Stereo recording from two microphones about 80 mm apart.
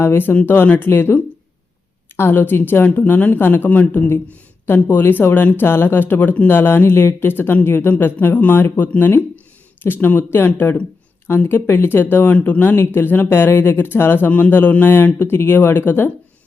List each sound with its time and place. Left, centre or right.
0.0 s speech: left